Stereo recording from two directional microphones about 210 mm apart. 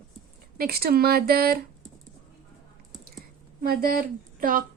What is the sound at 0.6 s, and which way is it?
Speech, 45° right (ahead or behind).